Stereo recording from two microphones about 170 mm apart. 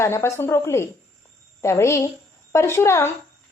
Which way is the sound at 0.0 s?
15° left (ahead or behind).